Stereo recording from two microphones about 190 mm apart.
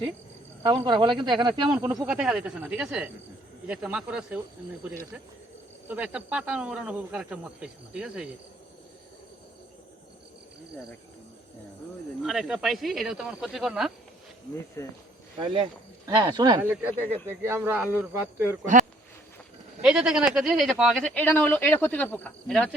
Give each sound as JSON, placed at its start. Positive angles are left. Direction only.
{"t": 0.6, "sound": "speech", "side_deg": -20}
{"t": 2.0, "sound": "speech", "side_deg": -5}
{"t": 5.9, "sound": "speech", "side_deg": -5}
{"t": 12.2, "sound": "speech", "side_deg": 0}
{"t": 14.8, "sound": "speech", "side_deg": 15}
{"t": 15.4, "sound": "speech", "side_deg": -25}
{"t": 16.6, "sound": "speech", "side_deg": -10}
{"t": 18.6, "sound": "speech", "side_deg": -40}
{"t": 19.8, "sound": "speech", "side_deg": -5}